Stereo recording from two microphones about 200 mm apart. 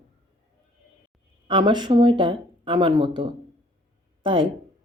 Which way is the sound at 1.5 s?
20° right (ahead or behind).